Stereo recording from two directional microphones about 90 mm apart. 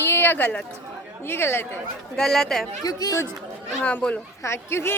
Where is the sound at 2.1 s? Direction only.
5° left (ahead or behind).